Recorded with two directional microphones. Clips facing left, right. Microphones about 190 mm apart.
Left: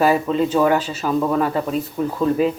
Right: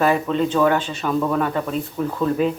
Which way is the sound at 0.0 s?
5° left (ahead or behind).